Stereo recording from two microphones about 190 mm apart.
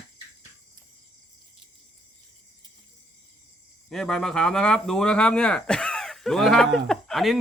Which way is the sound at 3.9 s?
5° left (ahead or behind).